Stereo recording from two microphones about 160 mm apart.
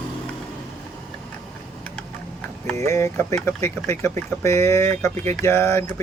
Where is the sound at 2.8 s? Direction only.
15° left (ahead or behind).